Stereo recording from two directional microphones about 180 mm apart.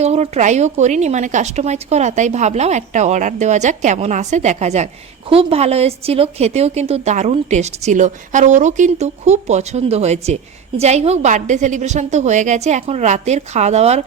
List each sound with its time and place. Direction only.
0.0 s a woman's voice: 35° right (ahead or behind)